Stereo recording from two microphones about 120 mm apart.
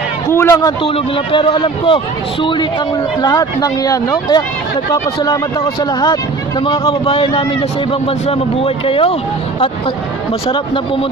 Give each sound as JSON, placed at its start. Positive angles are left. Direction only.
{"t": 0.3, "sound": "a man's voice", "side_deg": 20}
{"t": 0.8, "sound": "speech", "side_deg": 50}
{"t": 6.6, "sound": "speech", "side_deg": 45}
{"t": 10.5, "sound": "speech", "side_deg": 45}